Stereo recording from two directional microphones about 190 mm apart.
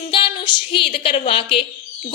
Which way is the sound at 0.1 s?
25° left (ahead or behind).